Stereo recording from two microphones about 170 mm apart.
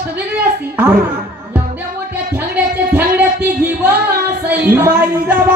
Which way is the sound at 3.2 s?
10° right (ahead or behind).